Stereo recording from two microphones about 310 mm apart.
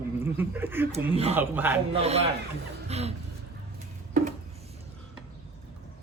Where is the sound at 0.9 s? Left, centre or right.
Centre.